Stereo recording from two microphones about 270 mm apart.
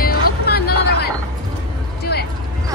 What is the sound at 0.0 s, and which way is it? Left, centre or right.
Music, left.